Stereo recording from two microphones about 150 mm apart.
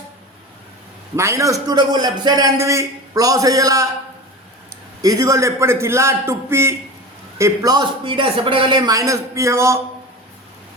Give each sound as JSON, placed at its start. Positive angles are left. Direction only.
{"t": 1.1, "sound": "a man's voice", "side_deg": -20}
{"t": 5.0, "sound": "a man's voice", "side_deg": -25}